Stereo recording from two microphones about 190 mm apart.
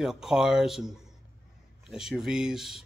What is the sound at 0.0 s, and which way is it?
A man's voice, centre (ahead or behind).